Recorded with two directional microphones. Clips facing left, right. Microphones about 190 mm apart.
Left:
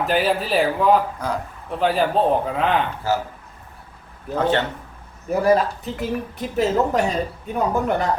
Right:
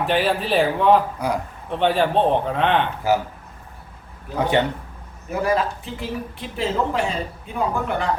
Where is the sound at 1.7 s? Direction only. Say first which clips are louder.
Right 1 dB; centre (ahead or behind).